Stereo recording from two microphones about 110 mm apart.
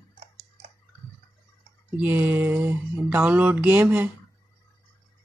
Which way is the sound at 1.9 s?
15° right (ahead or behind).